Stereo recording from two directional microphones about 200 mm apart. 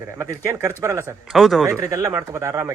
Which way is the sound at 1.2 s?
Centre (ahead or behind).